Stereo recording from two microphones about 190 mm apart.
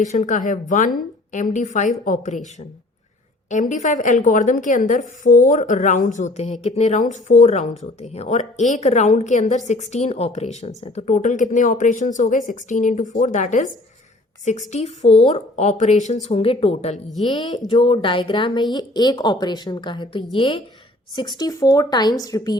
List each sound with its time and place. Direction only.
0.1 s a woman's voice: 40° left (ahead or behind)
14.7 s a woman's voice: 35° left (ahead or behind); by 22.5 s 20° left (ahead or behind)